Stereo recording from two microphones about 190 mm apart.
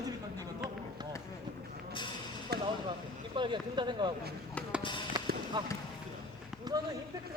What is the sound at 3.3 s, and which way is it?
Speech, 25° right (ahead or behind).